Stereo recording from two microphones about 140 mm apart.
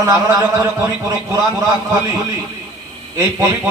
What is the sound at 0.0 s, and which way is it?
A man's voice, 20° right (ahead or behind).